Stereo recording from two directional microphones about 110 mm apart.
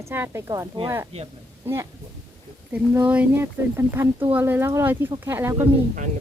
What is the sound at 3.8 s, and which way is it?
Speech, 25° right (ahead or behind).